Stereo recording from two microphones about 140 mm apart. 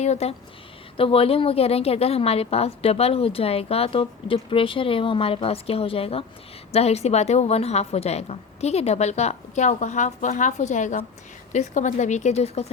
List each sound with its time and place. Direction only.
0.0 s a woman's voice: 50° left (ahead or behind)